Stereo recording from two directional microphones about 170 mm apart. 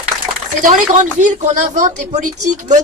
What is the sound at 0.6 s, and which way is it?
A woman's voice, 45° right (ahead or behind).